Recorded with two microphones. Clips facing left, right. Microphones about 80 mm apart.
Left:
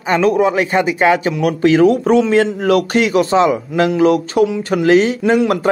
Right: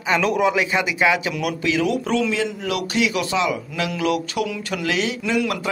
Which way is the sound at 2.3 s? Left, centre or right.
Left.